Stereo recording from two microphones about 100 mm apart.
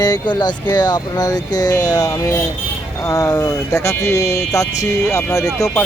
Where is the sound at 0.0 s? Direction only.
45° left (ahead or behind).